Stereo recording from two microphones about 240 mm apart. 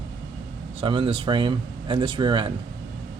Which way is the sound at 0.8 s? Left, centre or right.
Right.